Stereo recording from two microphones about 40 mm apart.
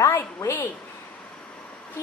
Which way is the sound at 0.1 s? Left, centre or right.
Left.